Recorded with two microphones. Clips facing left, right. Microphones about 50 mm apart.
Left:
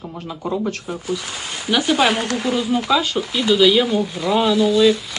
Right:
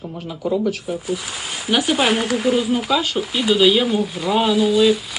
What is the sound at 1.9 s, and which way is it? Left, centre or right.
Speech, centre.